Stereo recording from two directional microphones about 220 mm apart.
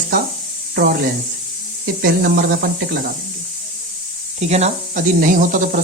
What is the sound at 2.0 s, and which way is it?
Speech, 40° right (ahead or behind).